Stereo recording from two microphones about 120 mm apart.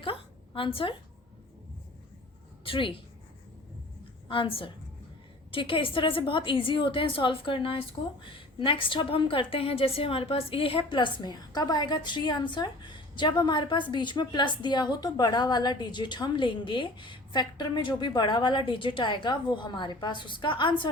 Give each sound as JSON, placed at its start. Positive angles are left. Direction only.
{"t": 0.0, "sound": "a sound", "side_deg": 50}
{"t": 2.6, "sound": "a woman's voice", "side_deg": 45}
{"t": 4.3, "sound": "a woman's voice", "side_deg": 50}